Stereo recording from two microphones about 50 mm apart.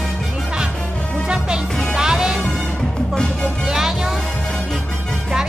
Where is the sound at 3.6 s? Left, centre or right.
Centre.